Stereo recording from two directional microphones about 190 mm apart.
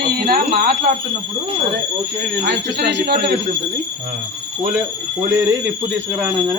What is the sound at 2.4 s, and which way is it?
Speech, 55° right (ahead or behind).